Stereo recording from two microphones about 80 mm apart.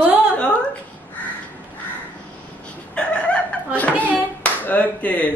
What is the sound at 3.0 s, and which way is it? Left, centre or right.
Chicken, centre.